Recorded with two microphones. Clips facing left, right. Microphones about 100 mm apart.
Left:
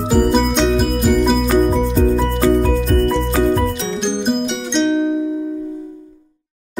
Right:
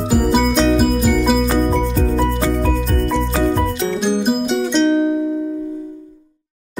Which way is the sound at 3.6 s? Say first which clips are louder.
Right 1 dB; 5° right (ahead or behind).